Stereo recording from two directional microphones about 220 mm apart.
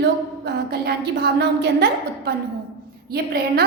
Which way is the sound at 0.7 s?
45° right (ahead or behind).